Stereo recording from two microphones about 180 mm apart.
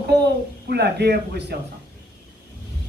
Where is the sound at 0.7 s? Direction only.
65° right (ahead or behind).